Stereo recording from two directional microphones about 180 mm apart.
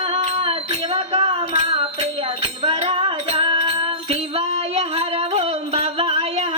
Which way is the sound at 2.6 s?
30° right (ahead or behind).